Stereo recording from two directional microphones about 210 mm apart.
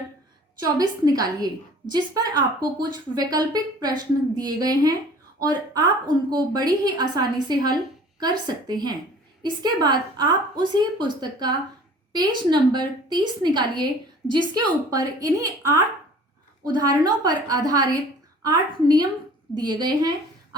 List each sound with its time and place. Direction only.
0.8 s a woman's voice: 20° right (ahead or behind)